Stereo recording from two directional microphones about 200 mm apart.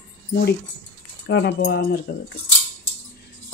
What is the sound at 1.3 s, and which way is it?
Speech, 60° left (ahead or behind).